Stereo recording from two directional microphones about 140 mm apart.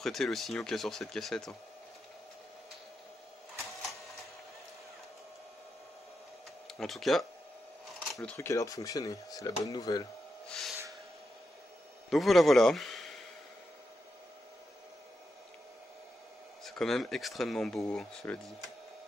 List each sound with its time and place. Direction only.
0.0 s speech: centre (ahead or behind)
6.7 s speech: centre (ahead or behind)
8.1 s a sound: 5° left (ahead or behind)
8.4 s speech: 25° left (ahead or behind)
10.4 s snort: centre (ahead or behind)
12.1 s speech: centre (ahead or behind)
16.6 s speech: 5° left (ahead or behind)